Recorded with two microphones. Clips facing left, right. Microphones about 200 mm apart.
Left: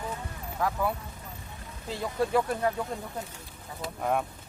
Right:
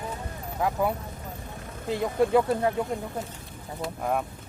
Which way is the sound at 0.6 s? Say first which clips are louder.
Right 3 dB; 20° right (ahead or behind).